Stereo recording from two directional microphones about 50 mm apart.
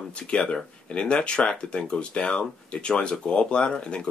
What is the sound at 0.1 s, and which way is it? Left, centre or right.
Speech, left.